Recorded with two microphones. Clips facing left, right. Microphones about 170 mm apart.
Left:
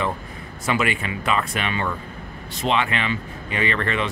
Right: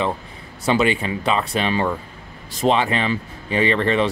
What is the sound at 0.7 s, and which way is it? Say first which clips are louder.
Speech: right 5 dB; 30° right (ahead or behind).